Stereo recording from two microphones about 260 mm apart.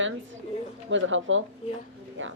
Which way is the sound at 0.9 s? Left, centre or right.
Right.